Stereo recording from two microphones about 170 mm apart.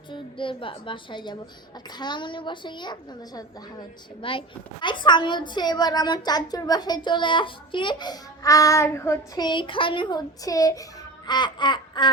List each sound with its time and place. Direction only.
0.1 s a woman's voice: 30° left (ahead or behind)